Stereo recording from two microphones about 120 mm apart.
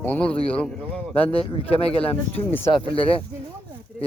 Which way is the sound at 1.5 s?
55° left (ahead or behind).